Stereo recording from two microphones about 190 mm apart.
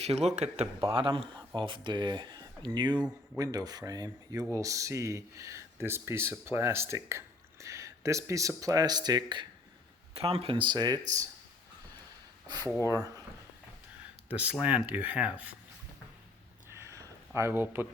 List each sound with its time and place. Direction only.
0.0 s speech: 35° right (ahead or behind)
12.8 s speech: 15° right (ahead or behind)
14.3 s speech: 5° right (ahead or behind)
16.6 s a sound: 15° right (ahead or behind)